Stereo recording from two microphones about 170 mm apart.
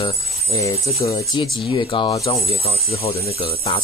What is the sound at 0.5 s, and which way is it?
Speech, 20° left (ahead or behind).